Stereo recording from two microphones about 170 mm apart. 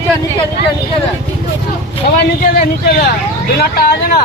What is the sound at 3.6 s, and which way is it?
Speech, 65° left (ahead or behind).